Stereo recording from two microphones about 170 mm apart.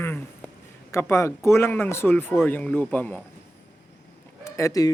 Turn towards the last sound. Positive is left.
turn(degrees=20)  # may be behind; listen again after turning